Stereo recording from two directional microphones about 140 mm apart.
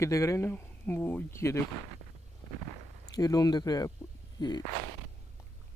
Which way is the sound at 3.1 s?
25° left (ahead or behind).